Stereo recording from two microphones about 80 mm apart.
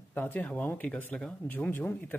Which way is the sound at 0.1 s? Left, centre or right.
Left.